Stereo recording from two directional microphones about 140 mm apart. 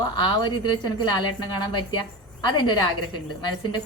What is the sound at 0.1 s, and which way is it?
A woman's voice, 30° left (ahead or behind).